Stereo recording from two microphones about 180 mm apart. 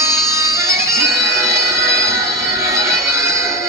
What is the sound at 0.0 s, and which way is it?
Music, 15° right (ahead or behind).